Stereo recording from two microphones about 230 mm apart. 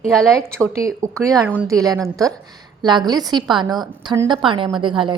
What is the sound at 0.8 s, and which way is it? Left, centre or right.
A woman's voice, centre.